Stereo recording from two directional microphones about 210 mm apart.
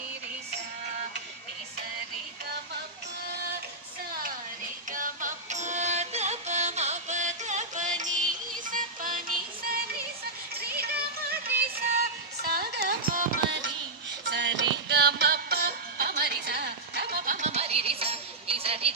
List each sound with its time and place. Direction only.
4.9 s music: 40° right (ahead or behind)
10.5 s music: 50° right (ahead or behind)
14.3 s music: 60° right (ahead or behind); by 18.9 s 30° right (ahead or behind)